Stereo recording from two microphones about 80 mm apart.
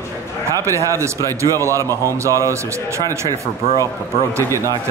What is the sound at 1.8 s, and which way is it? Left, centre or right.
Speech, left.